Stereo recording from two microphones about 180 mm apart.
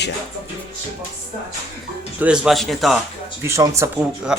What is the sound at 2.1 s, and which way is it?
Speech, 5° right (ahead or behind).